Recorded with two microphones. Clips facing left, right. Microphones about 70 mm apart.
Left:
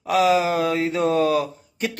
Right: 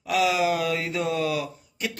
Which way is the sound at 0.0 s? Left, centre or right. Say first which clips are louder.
Left 4 dB; left.